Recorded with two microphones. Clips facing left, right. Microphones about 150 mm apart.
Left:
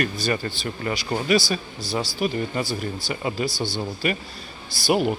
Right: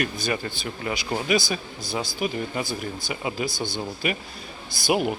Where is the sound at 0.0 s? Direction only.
10° right (ahead or behind).